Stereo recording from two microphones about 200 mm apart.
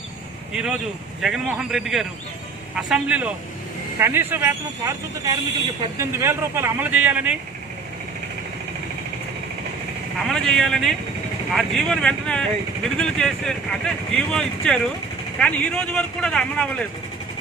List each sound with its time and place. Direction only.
0.5 s speech: 5° right (ahead or behind)
10.2 s speech: centre (ahead or behind)